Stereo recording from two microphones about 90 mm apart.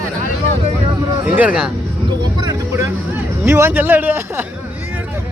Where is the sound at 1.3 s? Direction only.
15° right (ahead or behind).